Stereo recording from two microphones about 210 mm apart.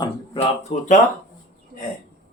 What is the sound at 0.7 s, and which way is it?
Speech, 30° left (ahead or behind).